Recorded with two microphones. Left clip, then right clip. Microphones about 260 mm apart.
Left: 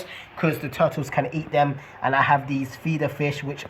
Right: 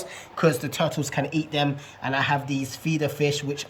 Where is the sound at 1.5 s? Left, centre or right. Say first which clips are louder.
Left 5 dB; centre.